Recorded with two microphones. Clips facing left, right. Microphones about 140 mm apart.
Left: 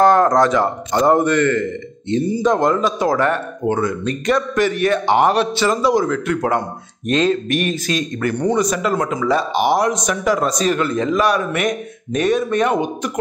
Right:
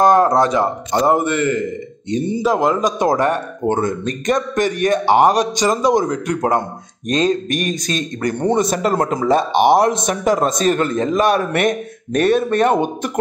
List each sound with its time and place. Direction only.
0.0 s a man's voice: 15° right (ahead or behind)
2.4 s a man's voice: 5° right (ahead or behind)
3.0 s speech: 20° right (ahead or behind)
3.8 s a man's voice: 45° right (ahead or behind)
4.9 s a man's voice: 15° right (ahead or behind)
6.2 s speech: 40° right (ahead or behind)
8.4 s speech: 25° right (ahead or behind); by 9.5 s 45° right (ahead or behind)
9.9 s speech: 25° right (ahead or behind)
10.8 s a man's voice: 45° right (ahead or behind)